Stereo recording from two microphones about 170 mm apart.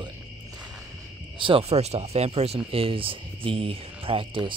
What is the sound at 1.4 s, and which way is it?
Speech, 35° right (ahead or behind).